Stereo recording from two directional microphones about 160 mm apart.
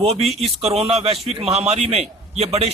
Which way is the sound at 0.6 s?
40° right (ahead or behind).